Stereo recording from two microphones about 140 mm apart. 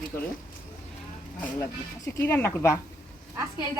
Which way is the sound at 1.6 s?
15° left (ahead or behind).